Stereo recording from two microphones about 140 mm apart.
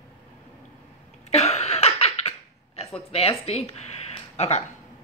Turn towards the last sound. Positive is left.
turn(degrees=50)  # may be behind; listen again after turning